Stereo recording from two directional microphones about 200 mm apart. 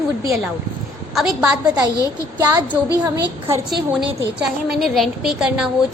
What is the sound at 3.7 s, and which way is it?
A woman's voice, centre (ahead or behind).